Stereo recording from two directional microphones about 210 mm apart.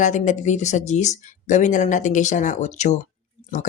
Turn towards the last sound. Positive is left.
turn(degrees=35)  # may be behind; listen again after turning